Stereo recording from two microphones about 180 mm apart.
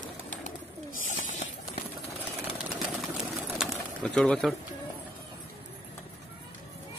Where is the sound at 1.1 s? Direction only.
45° left (ahead or behind).